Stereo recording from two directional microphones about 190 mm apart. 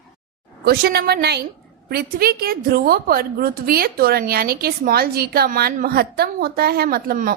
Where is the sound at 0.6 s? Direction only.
55° right (ahead or behind).